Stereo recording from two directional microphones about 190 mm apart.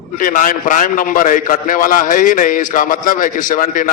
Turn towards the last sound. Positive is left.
turn(degrees=45)  # may be behind; listen again after turning